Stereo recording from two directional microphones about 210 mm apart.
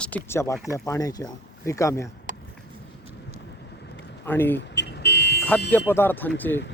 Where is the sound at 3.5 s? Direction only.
55° left (ahead or behind).